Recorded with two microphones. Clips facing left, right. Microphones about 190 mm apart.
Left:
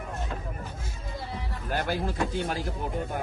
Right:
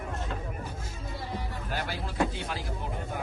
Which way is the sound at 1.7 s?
50° left (ahead or behind).